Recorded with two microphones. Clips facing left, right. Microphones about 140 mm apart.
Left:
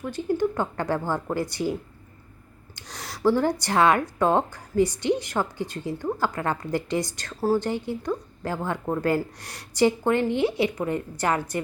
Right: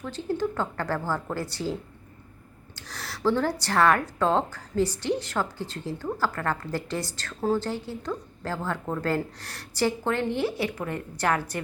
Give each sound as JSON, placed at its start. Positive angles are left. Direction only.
{"t": 0.0, "sound": "speech", "side_deg": 10}